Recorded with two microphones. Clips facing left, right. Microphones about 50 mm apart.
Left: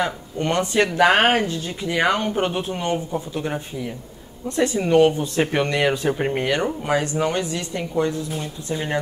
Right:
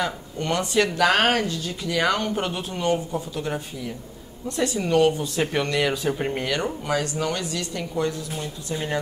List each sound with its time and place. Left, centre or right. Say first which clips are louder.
0.0 s speech: left 3 dB; left